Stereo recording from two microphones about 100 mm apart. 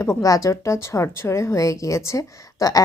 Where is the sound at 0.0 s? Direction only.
30° left (ahead or behind).